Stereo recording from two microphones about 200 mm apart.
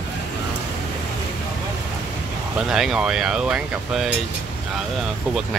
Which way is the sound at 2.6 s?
Centre (ahead or behind).